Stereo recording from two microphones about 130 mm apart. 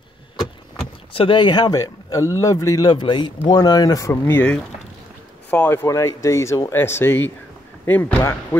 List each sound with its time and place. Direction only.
1.1 s speech: 40° left (ahead or behind); by 8.5 s 20° left (ahead or behind)